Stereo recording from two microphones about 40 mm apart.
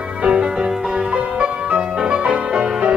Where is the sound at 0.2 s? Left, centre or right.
Right.